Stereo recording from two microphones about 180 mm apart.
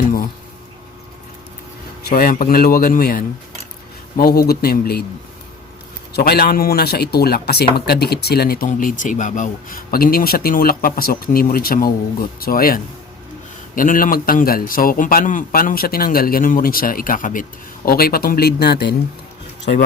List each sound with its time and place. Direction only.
2.0 s a man's voice: 55° left (ahead or behind)
6.1 s a man's voice: 60° left (ahead or behind)